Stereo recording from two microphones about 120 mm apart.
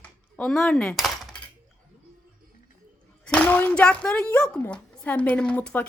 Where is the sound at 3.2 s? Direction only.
10° left (ahead or behind).